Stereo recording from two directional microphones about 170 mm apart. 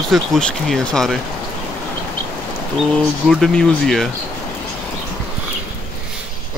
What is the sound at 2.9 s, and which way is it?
Speech, centre (ahead or behind).